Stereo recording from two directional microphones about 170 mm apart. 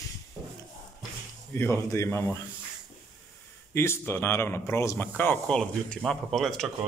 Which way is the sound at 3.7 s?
15° left (ahead or behind).